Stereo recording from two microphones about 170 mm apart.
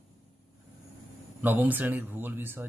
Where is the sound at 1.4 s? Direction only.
10° right (ahead or behind).